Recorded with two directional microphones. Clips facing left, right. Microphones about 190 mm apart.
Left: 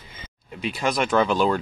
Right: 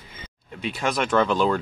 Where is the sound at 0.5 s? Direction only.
Centre (ahead or behind).